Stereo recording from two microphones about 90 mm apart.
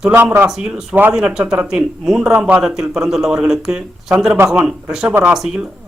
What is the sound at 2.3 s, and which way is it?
A man's voice, 15° right (ahead or behind).